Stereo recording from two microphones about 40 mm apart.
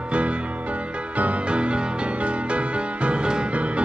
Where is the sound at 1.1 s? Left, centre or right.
Right.